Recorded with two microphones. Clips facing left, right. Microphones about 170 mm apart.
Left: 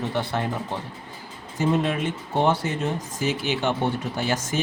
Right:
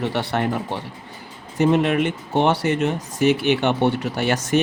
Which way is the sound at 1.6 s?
70° right (ahead or behind).